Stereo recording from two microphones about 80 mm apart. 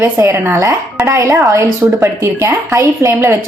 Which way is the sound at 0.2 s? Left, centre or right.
Right.